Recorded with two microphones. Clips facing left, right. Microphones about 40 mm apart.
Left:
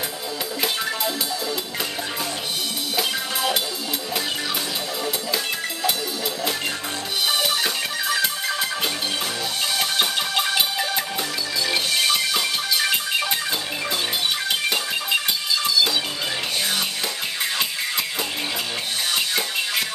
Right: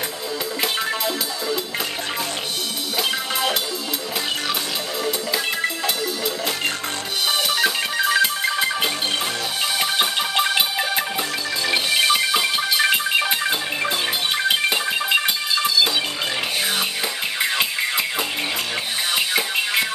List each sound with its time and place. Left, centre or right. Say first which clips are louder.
0.6 s music: right 1 dB; centre
7.4 s music: right 3 dB; centre
8.1 s music: right 3 dB; centre
17.4 s music: right 5 dB; centre
19.1 s music: right 4 dB; right